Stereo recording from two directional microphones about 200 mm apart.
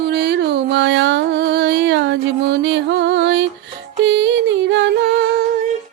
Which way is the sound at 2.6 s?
65° right (ahead or behind).